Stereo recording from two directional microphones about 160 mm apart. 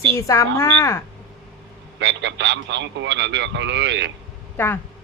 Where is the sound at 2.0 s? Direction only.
90° right.